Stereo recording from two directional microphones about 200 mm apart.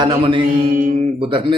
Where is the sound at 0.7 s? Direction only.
40° right (ahead or behind).